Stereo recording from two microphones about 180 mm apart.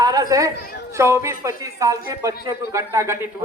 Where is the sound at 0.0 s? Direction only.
20° right (ahead or behind).